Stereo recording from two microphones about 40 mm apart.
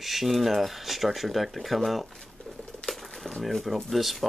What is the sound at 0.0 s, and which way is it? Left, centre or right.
Speech, centre.